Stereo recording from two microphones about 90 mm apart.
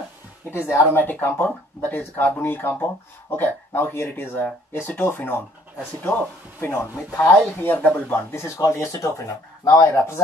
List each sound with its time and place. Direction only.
0.5 s speech: 25° left (ahead or behind)